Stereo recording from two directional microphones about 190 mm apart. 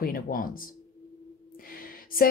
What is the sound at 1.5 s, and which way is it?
Gasp, 50° left (ahead or behind).